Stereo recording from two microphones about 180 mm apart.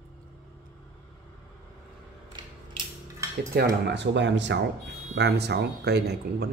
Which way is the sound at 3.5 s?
65° right (ahead or behind).